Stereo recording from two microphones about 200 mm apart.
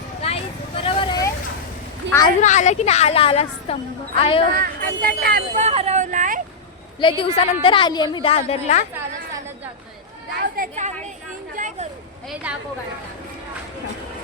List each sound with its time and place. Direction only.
0.2 s a sound: 30° left (ahead or behind)
0.8 s vehicle: 25° left (ahead or behind)
2.0 s a sound: 65° right (ahead or behind)
2.4 s a woman's voice: 35° left (ahead or behind)
4.5 s speech: 45° right (ahead or behind)
5.5 s speech: 35° right (ahead or behind)
7.0 s a woman's voice: 25° left (ahead or behind)
10.6 s a woman's voice: 35° right (ahead or behind)
11.5 s a sound: 40° right (ahead or behind)
12.3 s speech: 5° right (ahead or behind)